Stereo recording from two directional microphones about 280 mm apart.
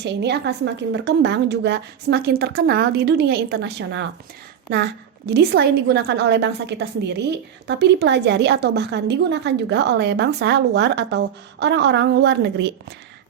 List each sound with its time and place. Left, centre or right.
0.0 s a woman's voice: right